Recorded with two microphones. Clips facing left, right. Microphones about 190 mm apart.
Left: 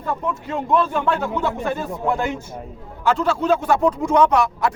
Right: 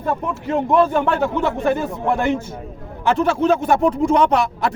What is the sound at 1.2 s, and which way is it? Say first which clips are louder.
Speech: right 4 dB; 25° right (ahead or behind).